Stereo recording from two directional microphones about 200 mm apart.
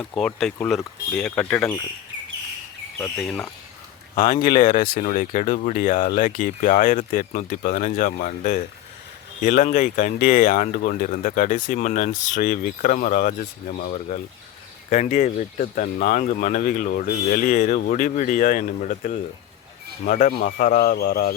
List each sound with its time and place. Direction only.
0.0 s speech: 5° left (ahead or behind)
3.2 s speech: centre (ahead or behind)
4.1 s speech: 20° left (ahead or behind)
4.4 s speech: 45° left (ahead or behind)